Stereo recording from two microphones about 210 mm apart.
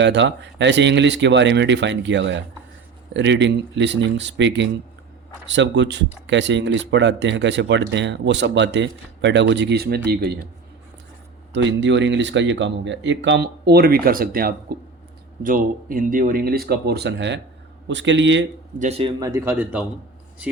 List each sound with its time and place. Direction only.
0.0 s speech: 55° right (ahead or behind)
11.5 s speech: 60° right (ahead or behind)
18.8 s speech: 30° right (ahead or behind); by 19.8 s 10° right (ahead or behind)